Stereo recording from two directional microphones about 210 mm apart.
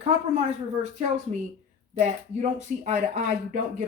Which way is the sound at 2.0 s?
35° right (ahead or behind).